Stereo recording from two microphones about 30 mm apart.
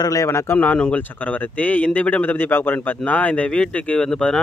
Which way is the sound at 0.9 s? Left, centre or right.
Left.